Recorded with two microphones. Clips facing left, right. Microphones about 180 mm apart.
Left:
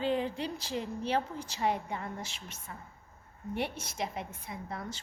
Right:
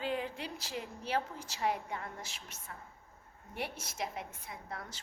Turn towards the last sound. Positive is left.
turn(degrees=0)  # may be behind; listen again after turning